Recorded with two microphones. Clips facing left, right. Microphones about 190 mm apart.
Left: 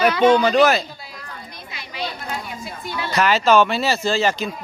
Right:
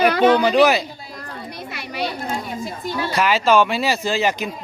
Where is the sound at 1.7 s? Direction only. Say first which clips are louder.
Right 3 dB; 65° right (ahead or behind).